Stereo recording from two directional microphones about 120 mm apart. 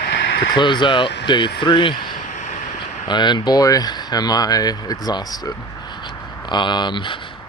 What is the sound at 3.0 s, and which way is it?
Speech, 40° left (ahead or behind).